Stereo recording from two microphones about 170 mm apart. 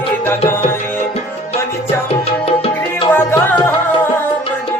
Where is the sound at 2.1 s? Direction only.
35° left (ahead or behind).